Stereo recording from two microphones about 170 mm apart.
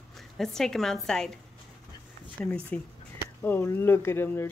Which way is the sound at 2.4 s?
5° left (ahead or behind).